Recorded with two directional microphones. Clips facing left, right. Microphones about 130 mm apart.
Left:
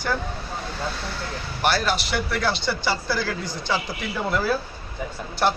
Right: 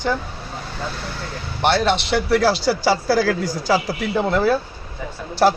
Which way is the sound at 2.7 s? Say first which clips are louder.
Right 7 dB; 90° right.